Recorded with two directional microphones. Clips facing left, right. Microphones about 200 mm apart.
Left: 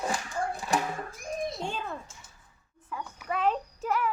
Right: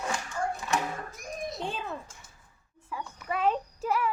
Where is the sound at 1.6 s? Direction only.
Centre (ahead or behind).